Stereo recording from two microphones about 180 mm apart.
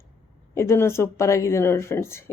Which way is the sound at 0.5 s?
15° left (ahead or behind).